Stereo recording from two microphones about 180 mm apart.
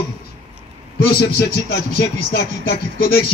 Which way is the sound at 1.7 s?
55° left (ahead or behind).